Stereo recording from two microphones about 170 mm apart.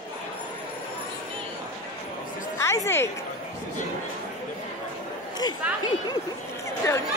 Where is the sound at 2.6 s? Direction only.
15° left (ahead or behind).